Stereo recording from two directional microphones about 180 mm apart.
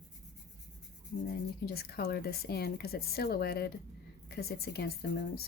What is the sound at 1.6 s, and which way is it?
Speech, 60° left (ahead or behind).